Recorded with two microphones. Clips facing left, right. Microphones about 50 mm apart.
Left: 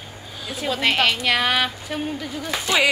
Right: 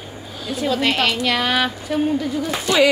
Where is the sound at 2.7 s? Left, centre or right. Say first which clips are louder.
Right 4 dB; left.